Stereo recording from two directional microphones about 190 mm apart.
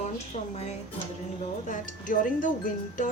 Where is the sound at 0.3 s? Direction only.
35° left (ahead or behind).